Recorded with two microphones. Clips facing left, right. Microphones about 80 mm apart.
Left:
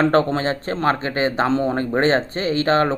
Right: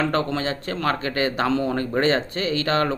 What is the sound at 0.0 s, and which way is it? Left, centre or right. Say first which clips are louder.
Speech: left 6 dB; left.